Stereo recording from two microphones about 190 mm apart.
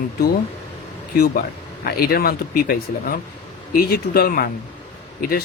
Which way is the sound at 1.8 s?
50° left (ahead or behind).